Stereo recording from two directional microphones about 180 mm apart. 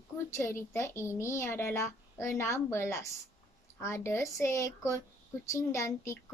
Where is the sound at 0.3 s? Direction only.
15° left (ahead or behind).